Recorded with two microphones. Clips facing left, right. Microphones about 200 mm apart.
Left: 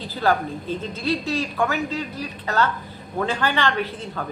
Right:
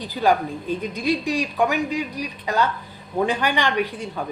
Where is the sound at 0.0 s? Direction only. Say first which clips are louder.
Right 2 dB; 15° right (ahead or behind).